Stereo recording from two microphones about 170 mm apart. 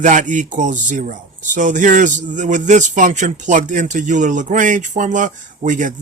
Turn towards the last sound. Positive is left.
turn(degrees=-50)  # may be behind; listen again after turning